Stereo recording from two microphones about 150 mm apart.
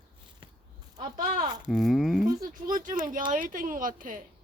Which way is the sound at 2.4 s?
60° right (ahead or behind).